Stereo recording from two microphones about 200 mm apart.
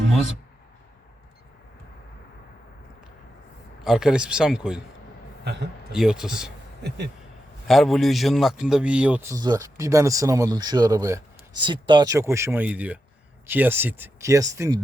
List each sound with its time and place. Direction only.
3.8 s a man's voice: 5° right (ahead or behind)
5.9 s a man's voice: 5° right (ahead or behind)
6.8 s speech: 55° right (ahead or behind)
7.7 s a man's voice: centre (ahead or behind); by 14.8 s 15° right (ahead or behind)